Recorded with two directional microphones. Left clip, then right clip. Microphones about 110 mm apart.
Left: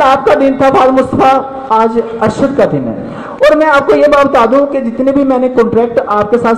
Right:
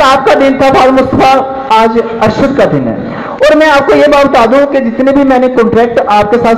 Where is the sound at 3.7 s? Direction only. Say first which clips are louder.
Right 2 dB; 15° left (ahead or behind).